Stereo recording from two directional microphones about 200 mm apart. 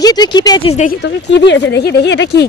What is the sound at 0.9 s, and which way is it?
Speech, 60° left (ahead or behind).